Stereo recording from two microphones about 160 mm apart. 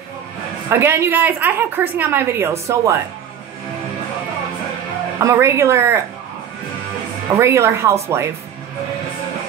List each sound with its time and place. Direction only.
0.7 s a woman's voice: 15° right (ahead or behind)
5.2 s a woman's voice: 15° right (ahead or behind)
7.3 s a woman's voice: 15° right (ahead or behind)